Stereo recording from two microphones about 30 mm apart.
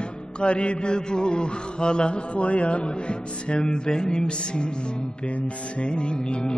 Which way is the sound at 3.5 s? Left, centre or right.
Left.